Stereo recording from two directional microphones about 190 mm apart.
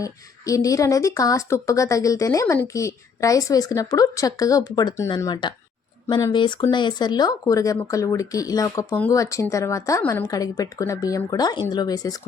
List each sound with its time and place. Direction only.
0.0 s speech: 15° left (ahead or behind)